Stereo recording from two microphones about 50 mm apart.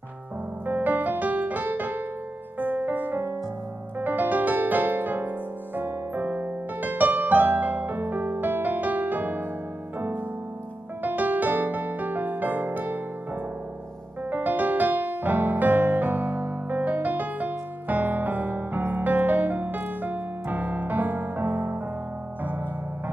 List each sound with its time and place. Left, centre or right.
0.7 s music: right
14.3 s music: right